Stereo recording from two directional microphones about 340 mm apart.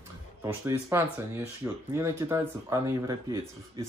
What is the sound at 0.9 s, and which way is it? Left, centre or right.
Speech, centre.